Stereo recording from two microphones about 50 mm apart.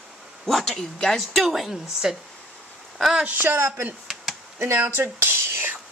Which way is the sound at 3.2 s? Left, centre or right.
Right.